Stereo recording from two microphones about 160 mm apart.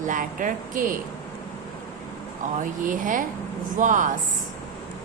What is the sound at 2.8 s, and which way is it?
A woman's voice, 55° right (ahead or behind).